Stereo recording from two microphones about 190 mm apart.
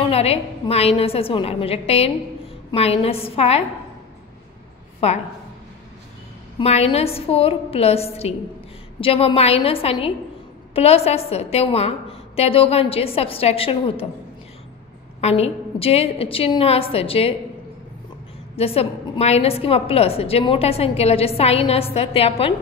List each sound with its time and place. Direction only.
0.1 s a woman's voice: 30° left (ahead or behind)
6.6 s a woman's voice: 30° left (ahead or behind)
15.1 s a woman's voice: 35° left (ahead or behind)
18.6 s a woman's voice: 30° left (ahead or behind)